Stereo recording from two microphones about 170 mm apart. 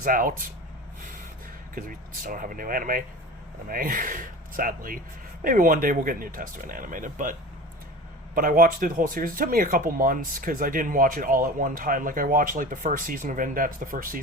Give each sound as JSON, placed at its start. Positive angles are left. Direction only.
{"t": 0.0, "sound": "speech", "side_deg": -55}
{"t": 1.7, "sound": "speech", "side_deg": -55}
{"t": 8.4, "sound": "speech", "side_deg": -55}